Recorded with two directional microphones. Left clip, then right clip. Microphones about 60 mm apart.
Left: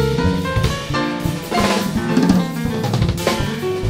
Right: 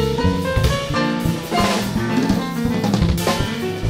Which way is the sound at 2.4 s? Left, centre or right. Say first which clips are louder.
Right 1 dB; centre.